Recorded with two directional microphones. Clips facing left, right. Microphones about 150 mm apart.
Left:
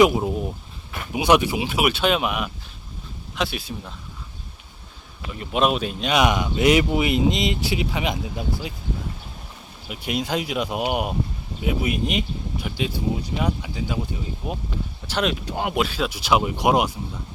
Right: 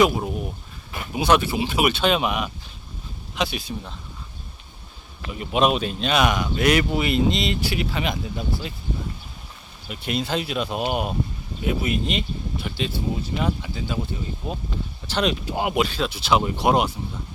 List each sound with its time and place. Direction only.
0.0 s a sound: 20° left (ahead or behind)
1.1 s speech: 15° left (ahead or behind)
5.3 s speech: 5° right (ahead or behind); by 8.7 s 15° left (ahead or behind)
9.9 s speech: 10° left (ahead or behind)